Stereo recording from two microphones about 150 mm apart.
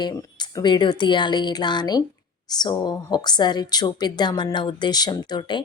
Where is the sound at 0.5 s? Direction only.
30° left (ahead or behind).